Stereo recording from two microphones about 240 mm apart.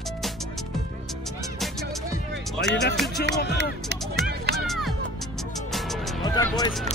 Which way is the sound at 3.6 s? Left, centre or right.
Right.